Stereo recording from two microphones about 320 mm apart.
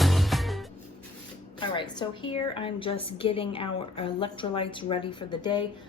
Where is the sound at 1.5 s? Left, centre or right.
Centre.